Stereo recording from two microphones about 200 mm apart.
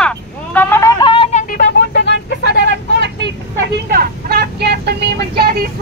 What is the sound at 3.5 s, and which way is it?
Vehicle, 55° right (ahead or behind).